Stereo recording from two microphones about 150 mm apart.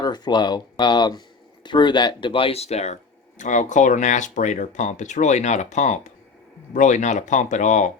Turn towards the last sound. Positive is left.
turn(degrees=55)  # may be behind; listen again after turning